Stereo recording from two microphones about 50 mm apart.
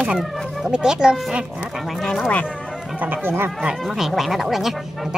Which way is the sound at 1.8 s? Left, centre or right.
Centre.